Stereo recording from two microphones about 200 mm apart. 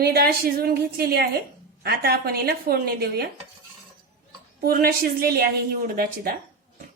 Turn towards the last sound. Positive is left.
turn(degrees=-45)  # may be behind; listen again after turning